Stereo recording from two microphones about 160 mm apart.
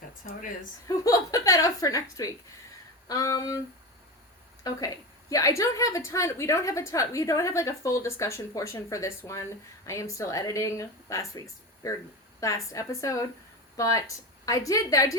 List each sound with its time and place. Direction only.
0.9 s a woman's voice: 20° left (ahead or behind)
4.6 s a woman's voice: 20° left (ahead or behind)